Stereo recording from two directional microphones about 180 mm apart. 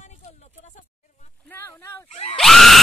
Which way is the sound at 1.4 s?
10° left (ahead or behind).